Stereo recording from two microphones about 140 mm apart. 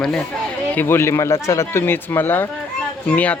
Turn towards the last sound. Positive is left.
turn(degrees=10)  # may be behind; listen again after turning